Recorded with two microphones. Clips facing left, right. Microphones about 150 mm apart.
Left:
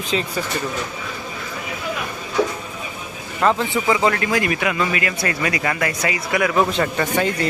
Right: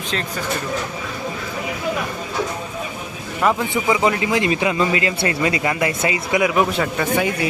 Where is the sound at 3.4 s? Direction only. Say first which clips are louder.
Even; 15° right (ahead or behind).